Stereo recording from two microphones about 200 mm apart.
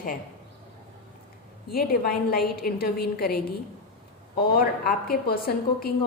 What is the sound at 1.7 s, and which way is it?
A woman's voice, 50° left (ahead or behind).